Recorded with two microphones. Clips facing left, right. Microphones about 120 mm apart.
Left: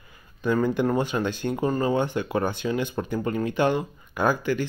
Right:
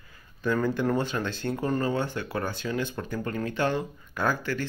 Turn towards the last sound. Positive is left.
turn(degrees=15)  # may be behind; listen again after turning